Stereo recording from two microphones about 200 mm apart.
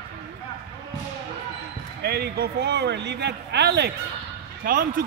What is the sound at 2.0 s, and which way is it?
A man's voice, 55° right (ahead or behind).